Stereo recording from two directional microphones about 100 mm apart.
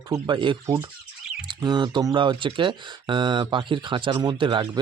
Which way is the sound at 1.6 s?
45° right (ahead or behind).